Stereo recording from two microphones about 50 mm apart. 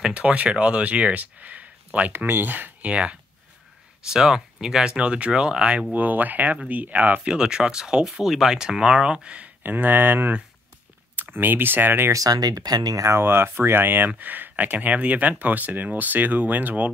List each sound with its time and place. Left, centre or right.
0.0 s speech: right
2.1 s speech: right
2.9 s speech: right
4.1 s speech: centre
5.9 s speech: right
7.2 s speech: centre
9.6 s speech: right
13.2 s speech: right